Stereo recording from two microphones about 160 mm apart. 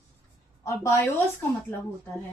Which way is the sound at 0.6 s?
20° left (ahead or behind).